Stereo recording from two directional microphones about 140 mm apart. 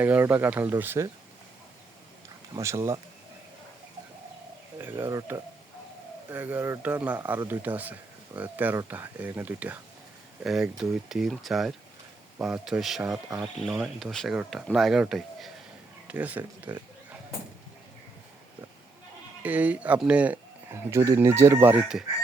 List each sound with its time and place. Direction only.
0.0 s speech: 15° right (ahead or behind)
2.6 s chicken: 20° right (ahead or behind)
4.8 s speech: 15° right (ahead or behind)
5.0 s chicken: 25° right (ahead or behind)
6.3 s speech: 10° right (ahead or behind)
10.4 s speech: centre (ahead or behind)
19.4 s speech: 10° right (ahead or behind)
20.7 s chicken: 20° right (ahead or behind)
21.8 s speech: centre (ahead or behind)